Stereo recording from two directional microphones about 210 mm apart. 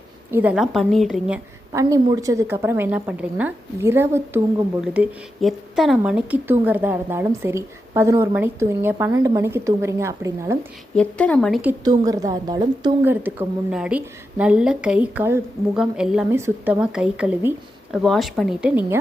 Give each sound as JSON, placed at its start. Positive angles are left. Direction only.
{"t": 0.3, "sound": "a woman's voice", "side_deg": -10}
{"t": 1.7, "sound": "speech", "side_deg": -15}
{"t": 10.9, "sound": "a woman's voice", "side_deg": 5}
{"t": 11.9, "sound": "a woman's voice", "side_deg": -15}
{"t": 13.2, "sound": "a woman's voice", "side_deg": -5}